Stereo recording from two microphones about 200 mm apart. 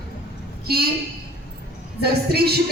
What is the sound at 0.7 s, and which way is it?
Speech, 50° right (ahead or behind).